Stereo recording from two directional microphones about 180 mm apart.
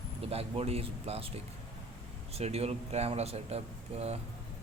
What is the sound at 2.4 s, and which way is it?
Speech, 35° right (ahead or behind).